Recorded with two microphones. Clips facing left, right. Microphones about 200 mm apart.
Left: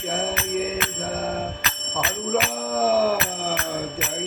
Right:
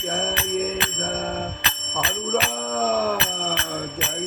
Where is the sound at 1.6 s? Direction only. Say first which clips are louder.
Left 1 dB; 30° right (ahead or behind).